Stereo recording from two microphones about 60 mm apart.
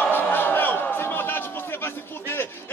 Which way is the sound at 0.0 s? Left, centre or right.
Left.